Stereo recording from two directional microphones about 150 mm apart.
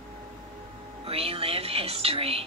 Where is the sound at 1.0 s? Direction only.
40° right (ahead or behind).